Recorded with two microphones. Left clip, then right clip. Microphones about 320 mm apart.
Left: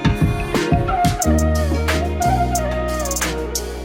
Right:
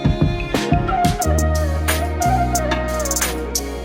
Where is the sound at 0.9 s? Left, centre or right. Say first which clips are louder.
Even; centre.